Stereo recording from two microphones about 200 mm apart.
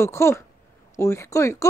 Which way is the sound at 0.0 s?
15° left (ahead or behind).